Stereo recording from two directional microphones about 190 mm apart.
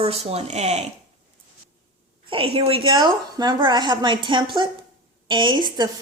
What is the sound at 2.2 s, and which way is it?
A woman's voice, 30° right (ahead or behind).